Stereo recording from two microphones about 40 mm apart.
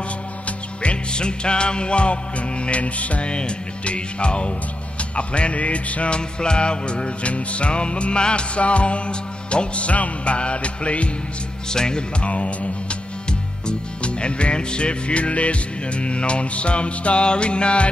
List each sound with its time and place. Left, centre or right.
0.5 s music: left
11.7 s music: centre
12.2 s speech: left
13.3 s music: left